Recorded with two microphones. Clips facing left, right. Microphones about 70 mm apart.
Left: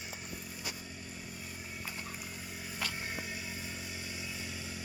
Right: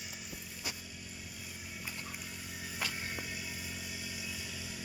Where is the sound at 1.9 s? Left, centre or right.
Left.